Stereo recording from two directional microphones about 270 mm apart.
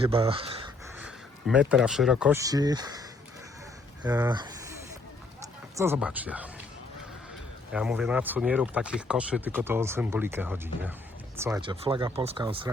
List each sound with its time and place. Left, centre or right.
0.0 s speech: centre
0.9 s speech: centre
4.0 s speech: centre
5.7 s speech: centre
7.7 s speech: centre; by 12.5 s right